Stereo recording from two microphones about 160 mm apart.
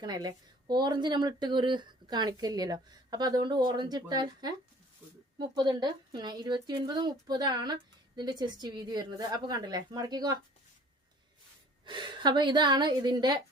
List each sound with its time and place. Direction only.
0.0 s a woman's voice: 25° right (ahead or behind)
11.9 s a woman's voice: 30° right (ahead or behind)